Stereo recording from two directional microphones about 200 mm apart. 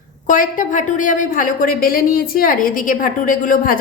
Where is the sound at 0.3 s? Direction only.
40° left (ahead or behind).